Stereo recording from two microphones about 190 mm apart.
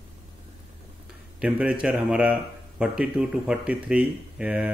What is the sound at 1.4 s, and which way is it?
A man's voice, 5° right (ahead or behind).